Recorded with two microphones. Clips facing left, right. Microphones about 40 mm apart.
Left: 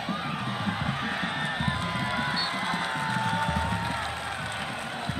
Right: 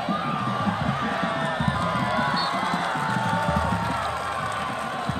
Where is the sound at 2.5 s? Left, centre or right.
Right.